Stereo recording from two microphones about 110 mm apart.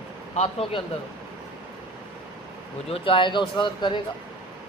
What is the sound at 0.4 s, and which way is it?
Speech, 75° left (ahead or behind).